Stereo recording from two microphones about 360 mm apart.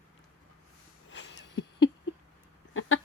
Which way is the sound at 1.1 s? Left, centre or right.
Left.